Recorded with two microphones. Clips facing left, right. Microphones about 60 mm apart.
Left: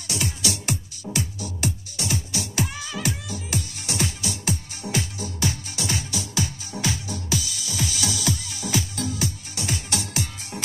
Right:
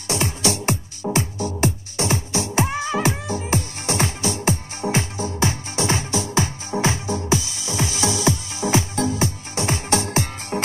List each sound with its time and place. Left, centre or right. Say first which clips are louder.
0.1 s music: right 6 dB; right